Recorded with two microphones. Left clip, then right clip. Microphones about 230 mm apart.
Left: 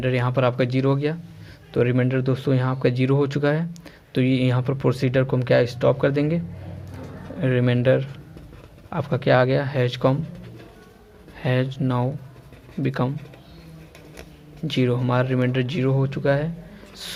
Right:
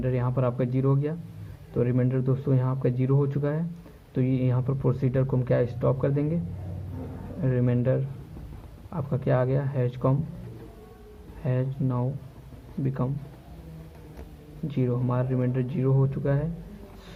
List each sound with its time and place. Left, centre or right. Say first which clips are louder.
0.0 s speech: left 7 dB; left
7.4 s speech: left 7 dB; left
11.4 s speech: left 7 dB; left
14.7 s speech: left 7 dB; left